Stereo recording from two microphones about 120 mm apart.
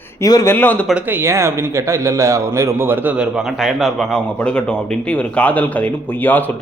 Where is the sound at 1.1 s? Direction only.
25° right (ahead or behind); by 6.4 s 15° left (ahead or behind).